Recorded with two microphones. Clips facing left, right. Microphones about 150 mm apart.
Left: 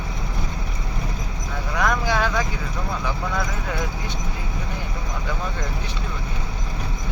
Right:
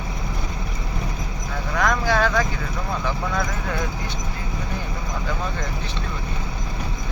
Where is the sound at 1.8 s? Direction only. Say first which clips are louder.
Right 2 dB; 15° left (ahead or behind).